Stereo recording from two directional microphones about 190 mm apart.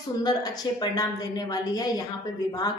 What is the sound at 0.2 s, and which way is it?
Speech, 20° left (ahead or behind).